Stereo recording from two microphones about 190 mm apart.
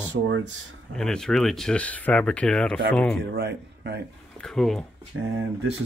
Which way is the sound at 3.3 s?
60° right (ahead or behind).